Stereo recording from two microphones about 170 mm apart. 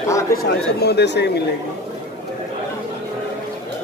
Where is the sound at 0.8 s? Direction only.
80° left.